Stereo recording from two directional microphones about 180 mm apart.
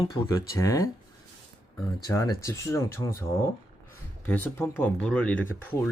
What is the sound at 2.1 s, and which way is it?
Speech, 15° left (ahead or behind).